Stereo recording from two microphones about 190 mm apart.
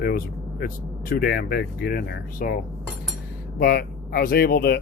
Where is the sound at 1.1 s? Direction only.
55° left (ahead or behind).